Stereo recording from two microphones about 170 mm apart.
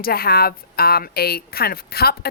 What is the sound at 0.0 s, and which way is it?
Speech, 65° left (ahead or behind).